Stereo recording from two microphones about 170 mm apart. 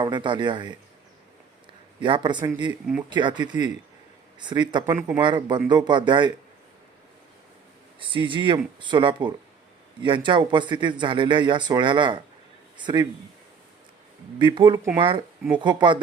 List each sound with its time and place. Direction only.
0.0 s speech: 30° right (ahead or behind)
2.0 s speech: 30° right (ahead or behind)
4.9 s speech: 10° right (ahead or behind)
5.2 s speech: 25° right (ahead or behind)
7.9 s a man's voice: 30° right (ahead or behind)
14.3 s speech: 30° right (ahead or behind)